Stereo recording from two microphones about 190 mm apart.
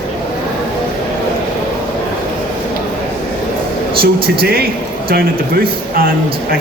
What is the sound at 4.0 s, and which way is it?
Speech, 55° right (ahead or behind).